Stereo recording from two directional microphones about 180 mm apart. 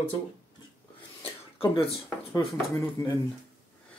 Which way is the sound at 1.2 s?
30° left (ahead or behind).